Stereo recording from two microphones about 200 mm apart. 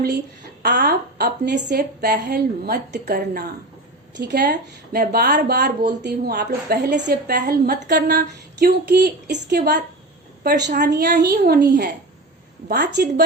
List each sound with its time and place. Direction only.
0.6 s a woman's voice: 55° right (ahead or behind)